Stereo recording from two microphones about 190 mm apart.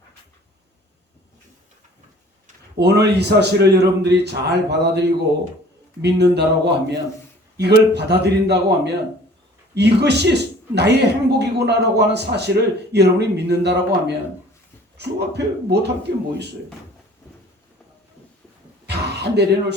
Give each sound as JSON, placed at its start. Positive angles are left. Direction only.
{"t": 2.7, "sound": "a man's voice", "side_deg": -60}
{"t": 6.1, "sound": "a man's voice", "side_deg": -65}
{"t": 18.9, "sound": "speech", "side_deg": -60}